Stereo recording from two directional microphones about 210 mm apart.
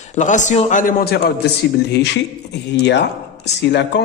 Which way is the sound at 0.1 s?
35° left (ahead or behind).